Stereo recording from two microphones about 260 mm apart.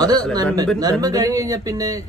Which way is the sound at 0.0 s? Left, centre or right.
Centre.